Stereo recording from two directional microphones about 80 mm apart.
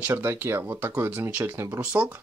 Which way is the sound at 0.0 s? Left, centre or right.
Right.